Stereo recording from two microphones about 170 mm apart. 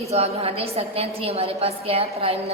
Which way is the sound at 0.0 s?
35° right (ahead or behind).